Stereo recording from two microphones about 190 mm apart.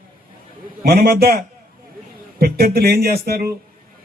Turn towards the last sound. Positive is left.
turn(degrees=-55)  # may be behind; listen again after turning